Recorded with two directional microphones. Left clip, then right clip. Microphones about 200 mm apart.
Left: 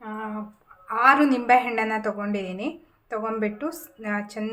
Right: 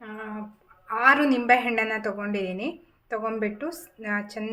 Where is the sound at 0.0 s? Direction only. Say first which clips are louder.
Left 4 dB; centre (ahead or behind).